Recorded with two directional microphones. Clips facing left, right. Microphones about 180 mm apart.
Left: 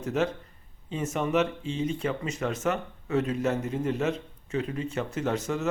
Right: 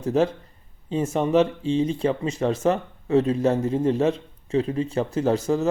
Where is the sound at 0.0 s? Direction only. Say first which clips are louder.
Right 6 dB; 35° right (ahead or behind).